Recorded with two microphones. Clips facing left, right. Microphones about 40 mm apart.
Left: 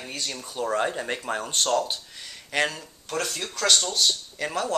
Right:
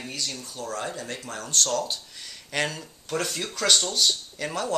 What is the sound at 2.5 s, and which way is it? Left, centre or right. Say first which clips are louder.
Speech: left 2 dB; centre.